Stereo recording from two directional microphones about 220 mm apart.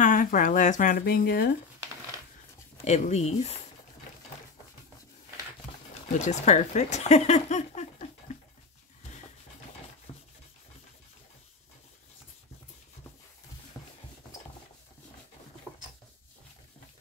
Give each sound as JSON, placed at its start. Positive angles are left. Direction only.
{"t": 0.0, "sound": "speech", "side_deg": 40}
{"t": 2.8, "sound": "speech", "side_deg": 30}
{"t": 6.2, "sound": "speech", "side_deg": 30}